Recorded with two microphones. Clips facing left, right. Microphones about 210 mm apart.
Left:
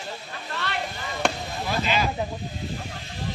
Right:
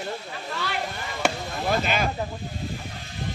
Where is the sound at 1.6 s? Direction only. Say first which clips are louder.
Right 1 dB; 50° right (ahead or behind).